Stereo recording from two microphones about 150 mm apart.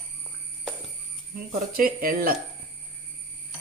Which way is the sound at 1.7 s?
75° right (ahead or behind).